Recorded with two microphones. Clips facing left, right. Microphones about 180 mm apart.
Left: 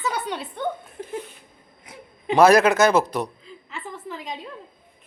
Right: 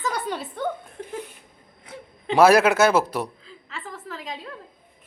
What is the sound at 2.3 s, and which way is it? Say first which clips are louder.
Speech: left 1 dB; 5° right (ahead or behind).